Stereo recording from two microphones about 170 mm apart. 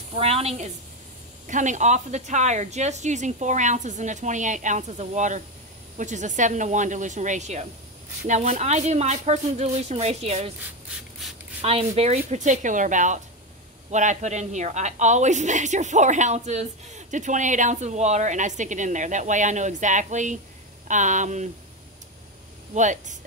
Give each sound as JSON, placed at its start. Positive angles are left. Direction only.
{"t": 0.1, "sound": "a woman's voice", "side_deg": -35}
{"t": 11.6, "sound": "a woman's voice", "side_deg": -35}
{"t": 22.8, "sound": "a woman's voice", "side_deg": -45}